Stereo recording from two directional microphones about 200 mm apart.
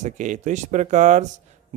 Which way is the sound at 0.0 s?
40° right (ahead or behind).